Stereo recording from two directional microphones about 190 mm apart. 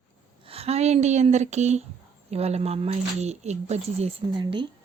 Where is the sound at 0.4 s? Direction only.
30° right (ahead or behind).